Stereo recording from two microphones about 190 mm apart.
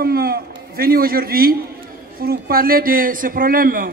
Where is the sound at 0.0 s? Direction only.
50° right (ahead or behind).